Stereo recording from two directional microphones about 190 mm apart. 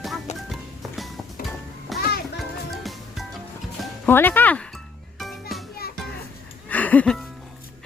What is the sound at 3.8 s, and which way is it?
Speech, 10° left (ahead or behind).